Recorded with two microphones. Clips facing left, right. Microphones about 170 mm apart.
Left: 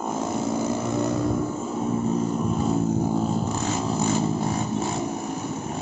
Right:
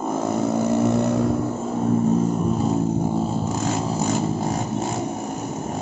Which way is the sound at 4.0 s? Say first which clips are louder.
Right 1 dB; 45° right (ahead or behind).